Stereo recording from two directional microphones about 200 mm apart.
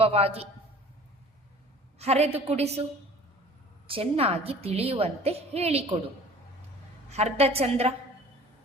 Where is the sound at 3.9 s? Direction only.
30° right (ahead or behind).